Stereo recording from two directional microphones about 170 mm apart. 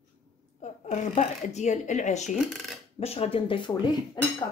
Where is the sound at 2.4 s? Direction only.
Centre (ahead or behind).